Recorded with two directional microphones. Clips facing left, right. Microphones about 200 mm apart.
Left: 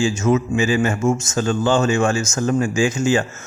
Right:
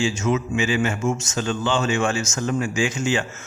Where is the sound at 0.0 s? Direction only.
45° left (ahead or behind).